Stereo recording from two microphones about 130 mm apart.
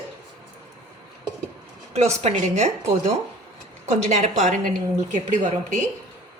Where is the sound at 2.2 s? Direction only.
60° right (ahead or behind).